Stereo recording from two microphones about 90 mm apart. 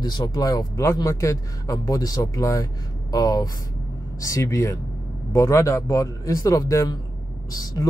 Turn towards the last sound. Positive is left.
turn(degrees=45)  # may be behind; listen again after turning